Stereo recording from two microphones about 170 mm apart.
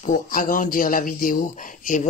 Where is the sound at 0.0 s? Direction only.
55° left (ahead or behind).